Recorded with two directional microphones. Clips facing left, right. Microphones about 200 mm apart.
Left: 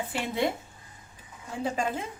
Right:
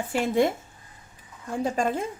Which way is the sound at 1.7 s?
45° right (ahead or behind).